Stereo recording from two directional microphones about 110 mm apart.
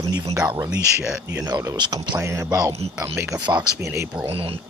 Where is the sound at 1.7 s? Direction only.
40° right (ahead or behind).